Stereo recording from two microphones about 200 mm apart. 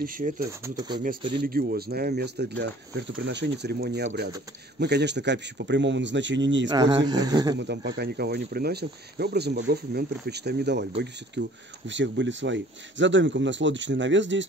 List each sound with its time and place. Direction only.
0.0 s speech: 45° right (ahead or behind)
0.5 s speech: 15° right (ahead or behind)
1.4 s speech: 50° right (ahead or behind); by 6.7 s 65° right (ahead or behind)
6.7 s speech: 20° right (ahead or behind)
7.5 s speech: 60° right (ahead or behind)